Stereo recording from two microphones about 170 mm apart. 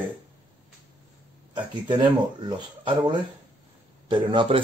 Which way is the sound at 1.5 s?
30° right (ahead or behind).